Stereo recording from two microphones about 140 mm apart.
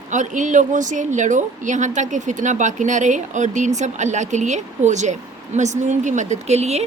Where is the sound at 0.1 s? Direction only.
65° right (ahead or behind).